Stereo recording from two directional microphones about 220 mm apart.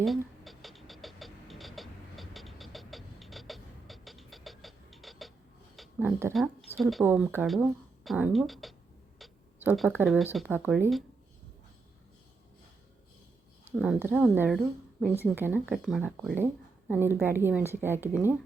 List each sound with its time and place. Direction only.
0.0 s a sound: centre (ahead or behind)
6.3 s a woman's voice: centre (ahead or behind)
13.7 s a woman's voice: 5° right (ahead or behind)